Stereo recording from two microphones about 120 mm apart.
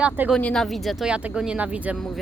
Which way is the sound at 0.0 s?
10° right (ahead or behind).